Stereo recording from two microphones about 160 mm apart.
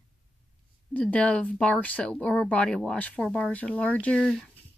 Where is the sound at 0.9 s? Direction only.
5° left (ahead or behind).